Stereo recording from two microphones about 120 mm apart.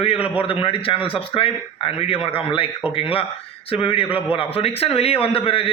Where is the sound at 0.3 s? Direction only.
45° left (ahead or behind).